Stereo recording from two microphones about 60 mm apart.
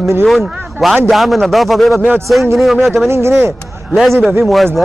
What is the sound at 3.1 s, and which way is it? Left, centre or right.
Speech, right.